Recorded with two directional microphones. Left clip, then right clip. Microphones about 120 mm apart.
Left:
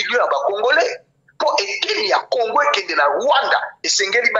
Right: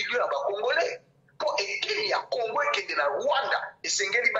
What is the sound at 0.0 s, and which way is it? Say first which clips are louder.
A man's voice: left 10 dB; 45° left (ahead or behind).